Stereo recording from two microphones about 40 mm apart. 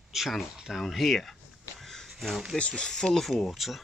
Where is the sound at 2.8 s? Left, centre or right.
Centre.